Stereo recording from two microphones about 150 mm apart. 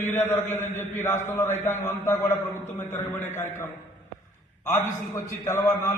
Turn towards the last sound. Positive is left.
turn(degrees=20)  # may be behind; listen again after turning